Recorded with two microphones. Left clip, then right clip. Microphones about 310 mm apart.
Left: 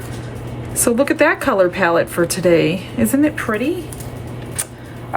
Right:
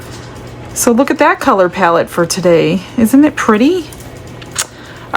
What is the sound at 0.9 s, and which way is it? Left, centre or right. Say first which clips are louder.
A woman's voice: right 5 dB; centre.